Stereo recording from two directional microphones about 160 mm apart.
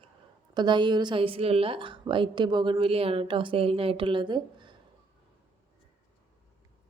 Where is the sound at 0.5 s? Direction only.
30° right (ahead or behind).